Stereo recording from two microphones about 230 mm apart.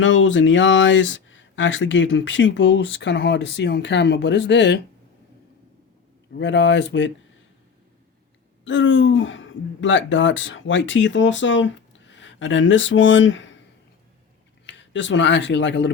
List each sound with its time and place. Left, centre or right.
0.0 s speech: left
6.3 s speech: left
8.6 s speech: left
14.7 s speech: left